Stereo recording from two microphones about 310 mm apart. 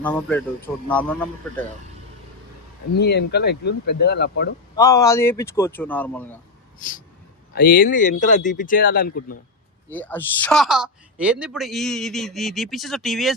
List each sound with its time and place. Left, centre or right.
0.0 s a woman's voice: centre
3.0 s speech: left
4.8 s speech: centre
7.5 s speech: left
9.9 s a woman's voice: centre